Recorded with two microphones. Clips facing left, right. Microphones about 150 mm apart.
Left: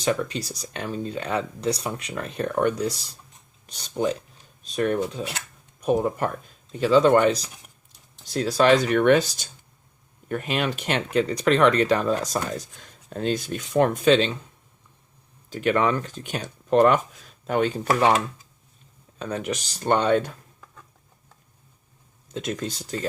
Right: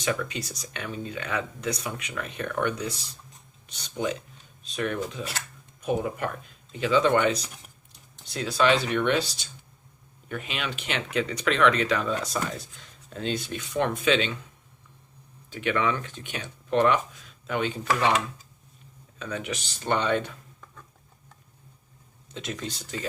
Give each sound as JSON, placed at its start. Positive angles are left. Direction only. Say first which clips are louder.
{"t": 0.0, "sound": "speech", "louder": "left 4 dB", "side_deg": 35}
{"t": 15.4, "sound": "speech", "louder": "left 4 dB", "side_deg": 40}
{"t": 19.2, "sound": "speech", "louder": "left 4 dB", "side_deg": 40}
{"t": 22.3, "sound": "speech", "louder": "left 5 dB", "side_deg": 45}